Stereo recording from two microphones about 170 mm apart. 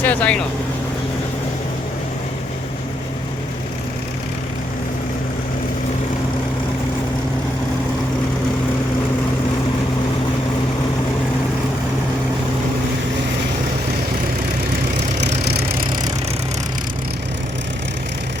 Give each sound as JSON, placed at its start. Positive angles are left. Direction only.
{"t": 0.0, "sound": "speech", "side_deg": 10}
{"t": 15.2, "sound": "vehicle", "side_deg": -80}